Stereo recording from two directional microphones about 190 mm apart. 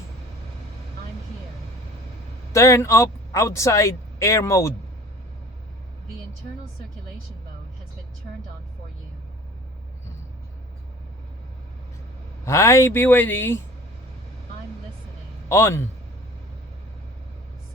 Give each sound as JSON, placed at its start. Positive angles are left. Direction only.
{"t": 2.5, "sound": "a man's voice", "side_deg": 15}
{"t": 12.5, "sound": "speech", "side_deg": 15}
{"t": 15.4, "sound": "a man's voice", "side_deg": 15}